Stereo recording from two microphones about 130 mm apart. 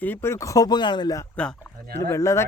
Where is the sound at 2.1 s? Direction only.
25° left (ahead or behind).